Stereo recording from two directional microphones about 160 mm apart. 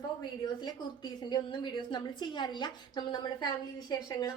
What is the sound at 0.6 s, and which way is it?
A woman's voice, 25° left (ahead or behind).